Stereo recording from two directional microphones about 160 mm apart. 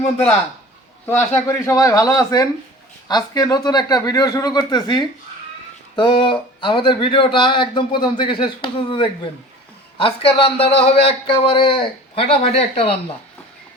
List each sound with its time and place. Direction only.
1.0 s speech: 15° left (ahead or behind); by 13.0 s 35° left (ahead or behind)